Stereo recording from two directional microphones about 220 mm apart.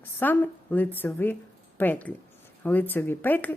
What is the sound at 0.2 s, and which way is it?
A woman's voice, 10° left (ahead or behind).